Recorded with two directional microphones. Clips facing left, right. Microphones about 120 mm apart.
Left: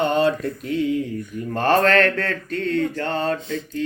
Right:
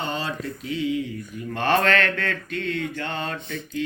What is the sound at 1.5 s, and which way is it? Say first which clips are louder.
Mantra: left 4 dB; 40° left (ahead or behind).